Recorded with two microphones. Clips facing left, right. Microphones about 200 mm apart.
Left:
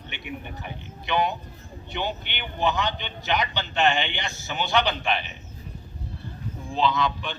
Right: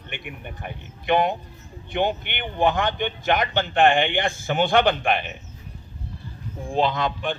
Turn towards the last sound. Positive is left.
turn(degrees=-50)  # may be behind; listen again after turning